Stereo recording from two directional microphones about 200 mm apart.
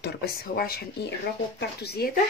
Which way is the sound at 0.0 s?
50° left (ahead or behind).